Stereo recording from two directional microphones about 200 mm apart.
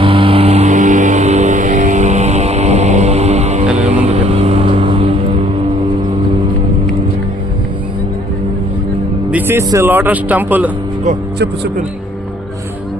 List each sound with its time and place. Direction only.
0.0 s music: 25° right (ahead or behind)
9.3 s speech: 10° right (ahead or behind)